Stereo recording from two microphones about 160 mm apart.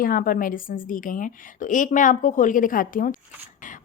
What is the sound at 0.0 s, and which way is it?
A woman's voice, 60° left (ahead or behind).